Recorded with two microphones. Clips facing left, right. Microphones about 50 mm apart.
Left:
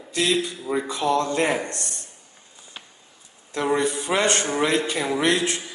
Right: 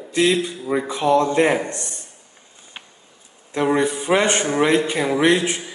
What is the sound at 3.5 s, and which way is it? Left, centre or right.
A man's voice, centre.